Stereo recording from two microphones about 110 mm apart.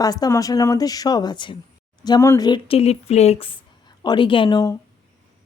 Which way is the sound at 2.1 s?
25° left (ahead or behind).